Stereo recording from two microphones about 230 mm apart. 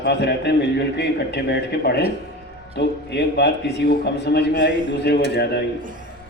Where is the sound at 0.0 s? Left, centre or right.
Left.